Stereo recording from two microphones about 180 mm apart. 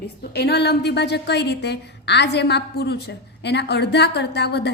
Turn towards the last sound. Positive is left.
turn(degrees=65)  # may be behind; listen again after turning